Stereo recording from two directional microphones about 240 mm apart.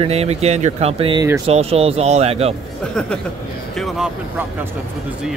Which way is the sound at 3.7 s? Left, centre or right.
Centre.